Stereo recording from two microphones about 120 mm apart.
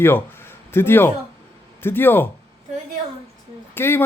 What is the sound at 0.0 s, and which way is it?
Speech, 20° left (ahead or behind).